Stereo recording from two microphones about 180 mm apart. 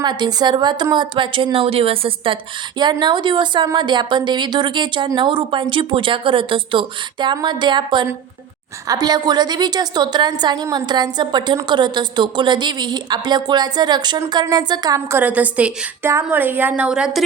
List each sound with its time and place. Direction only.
0.0 s speech: 25° right (ahead or behind); by 17.2 s centre (ahead or behind)